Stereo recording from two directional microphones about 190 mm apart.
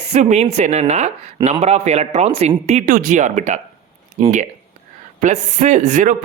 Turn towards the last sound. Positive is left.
turn(degrees=-40)  # may be behind; listen again after turning